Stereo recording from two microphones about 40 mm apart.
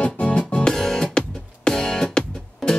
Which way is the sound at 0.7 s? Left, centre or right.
Centre.